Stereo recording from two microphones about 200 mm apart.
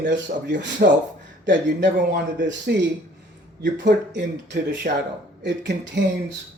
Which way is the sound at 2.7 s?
55° right (ahead or behind).